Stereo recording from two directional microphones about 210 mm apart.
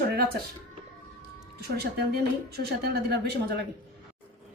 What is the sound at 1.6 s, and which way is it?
Speech, 50° right (ahead or behind).